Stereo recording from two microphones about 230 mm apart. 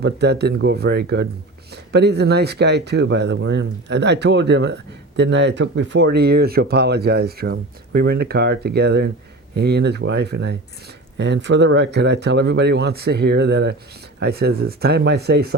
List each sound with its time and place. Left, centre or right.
0.0 s speech: right